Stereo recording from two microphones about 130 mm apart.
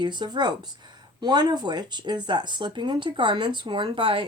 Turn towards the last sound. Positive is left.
turn(degrees=-40)  # may be behind; listen again after turning